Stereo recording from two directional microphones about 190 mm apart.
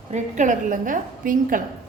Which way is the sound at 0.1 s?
40° right (ahead or behind).